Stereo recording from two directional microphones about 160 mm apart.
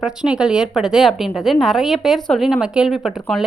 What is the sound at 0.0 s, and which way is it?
A woman's voice, 5° right (ahead or behind).